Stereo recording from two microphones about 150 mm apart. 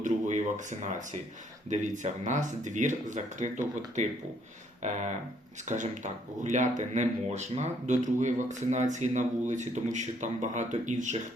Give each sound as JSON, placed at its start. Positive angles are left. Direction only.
{"t": 0.0, "sound": "speech", "side_deg": -55}
{"t": 4.8, "sound": "speech", "side_deg": -50}